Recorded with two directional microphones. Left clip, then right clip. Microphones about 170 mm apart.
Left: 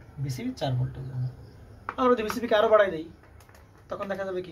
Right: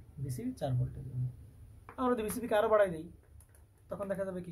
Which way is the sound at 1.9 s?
40° right (ahead or behind).